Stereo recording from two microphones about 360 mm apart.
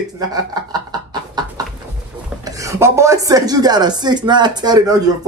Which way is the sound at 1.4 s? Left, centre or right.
Centre.